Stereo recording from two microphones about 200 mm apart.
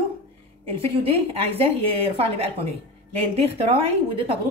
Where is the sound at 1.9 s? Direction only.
30° right (ahead or behind).